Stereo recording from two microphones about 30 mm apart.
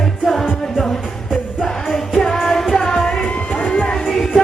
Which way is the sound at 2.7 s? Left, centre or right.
Left.